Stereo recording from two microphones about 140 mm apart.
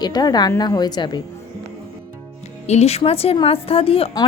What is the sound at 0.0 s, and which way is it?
A woman's voice, 30° left (ahead or behind).